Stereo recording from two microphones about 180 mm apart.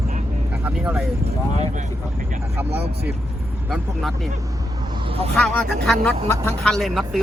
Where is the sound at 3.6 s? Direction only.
Centre (ahead or behind).